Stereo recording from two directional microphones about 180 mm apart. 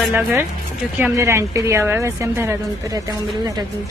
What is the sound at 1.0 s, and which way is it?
A woman's voice, 15° right (ahead or behind).